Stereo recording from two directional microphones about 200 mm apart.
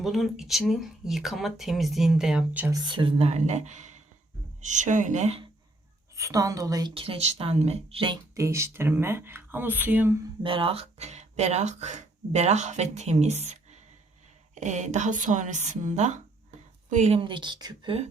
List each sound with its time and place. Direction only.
0.0 s speech: centre (ahead or behind)
2.7 s a woman's voice: 25° right (ahead or behind)
6.1 s speech: 15° right (ahead or behind)
10.4 s a woman's voice: 25° right (ahead or behind)